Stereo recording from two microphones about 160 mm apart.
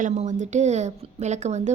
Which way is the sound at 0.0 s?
50° right (ahead or behind).